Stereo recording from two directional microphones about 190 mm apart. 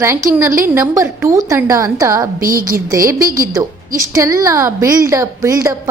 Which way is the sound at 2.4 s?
50° right (ahead or behind).